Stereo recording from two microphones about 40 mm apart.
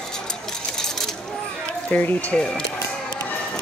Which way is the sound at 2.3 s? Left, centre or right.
Left.